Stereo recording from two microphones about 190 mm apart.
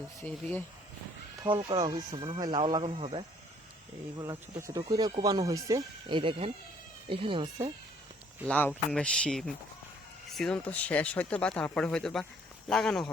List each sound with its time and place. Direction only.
0.2 s speech: 10° left (ahead or behind)
1.5 s speech: 25° right (ahead or behind)
4.2 s speech: 15° right (ahead or behind)
8.4 s speech: 5° left (ahead or behind)